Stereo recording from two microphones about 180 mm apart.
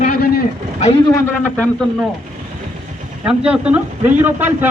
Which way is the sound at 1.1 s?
15° left (ahead or behind).